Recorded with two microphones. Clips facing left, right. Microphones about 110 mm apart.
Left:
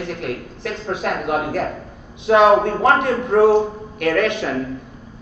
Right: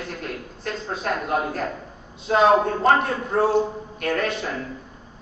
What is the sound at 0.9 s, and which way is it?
A man's voice, 65° left (ahead or behind).